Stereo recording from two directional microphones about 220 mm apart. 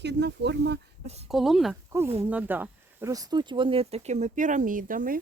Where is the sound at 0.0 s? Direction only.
50° right (ahead or behind).